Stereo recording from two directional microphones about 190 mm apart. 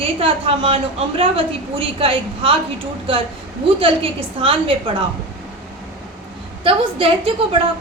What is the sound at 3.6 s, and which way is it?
A woman's voice, 30° right (ahead or behind).